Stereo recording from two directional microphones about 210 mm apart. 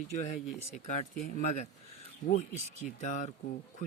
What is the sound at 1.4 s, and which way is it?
Speech, 35° left (ahead or behind).